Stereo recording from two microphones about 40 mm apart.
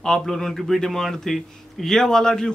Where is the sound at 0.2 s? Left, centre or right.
Centre.